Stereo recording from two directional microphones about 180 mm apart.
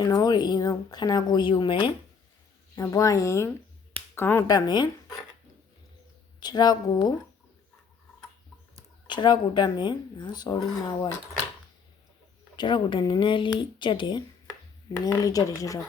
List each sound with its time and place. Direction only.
0.0 s speech: 20° left (ahead or behind)
6.4 s speech: 25° left (ahead or behind)
9.0 s speech: 25° left (ahead or behind)
12.5 s speech: 25° left (ahead or behind)